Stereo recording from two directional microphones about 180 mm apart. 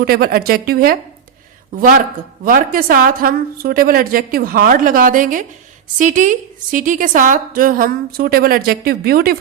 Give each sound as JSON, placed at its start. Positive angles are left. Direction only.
{"t": 0.0, "sound": "a woman's voice", "side_deg": -55}